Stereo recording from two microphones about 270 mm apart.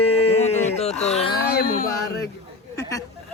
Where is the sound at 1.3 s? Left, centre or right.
Left.